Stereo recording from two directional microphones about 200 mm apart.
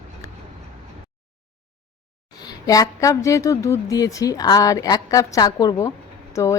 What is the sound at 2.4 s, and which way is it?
A woman's voice, 20° left (ahead or behind).